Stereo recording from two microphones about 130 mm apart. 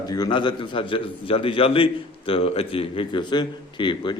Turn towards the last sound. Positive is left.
turn(degrees=40)  # may be behind; listen again after turning